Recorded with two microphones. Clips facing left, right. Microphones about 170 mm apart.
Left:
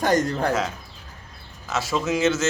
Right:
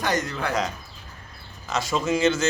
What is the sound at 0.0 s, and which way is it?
Speech, 45° left (ahead or behind).